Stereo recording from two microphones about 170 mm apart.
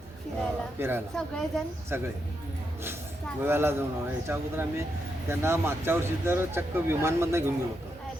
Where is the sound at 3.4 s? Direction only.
15° right (ahead or behind).